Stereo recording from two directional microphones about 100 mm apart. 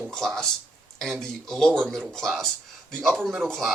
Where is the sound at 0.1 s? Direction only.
5° left (ahead or behind).